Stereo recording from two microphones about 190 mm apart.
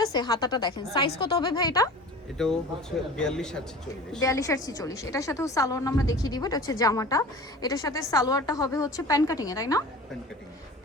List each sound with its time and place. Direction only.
0.0 s a woman's voice: 20° left (ahead or behind)
2.4 s a man's voice: 5° left (ahead or behind)
4.2 s a woman's voice: 15° left (ahead or behind)